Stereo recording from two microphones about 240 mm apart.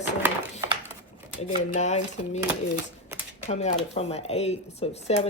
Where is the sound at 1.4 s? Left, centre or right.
Left.